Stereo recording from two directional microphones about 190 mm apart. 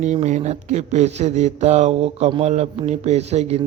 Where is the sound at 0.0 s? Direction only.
35° right (ahead or behind).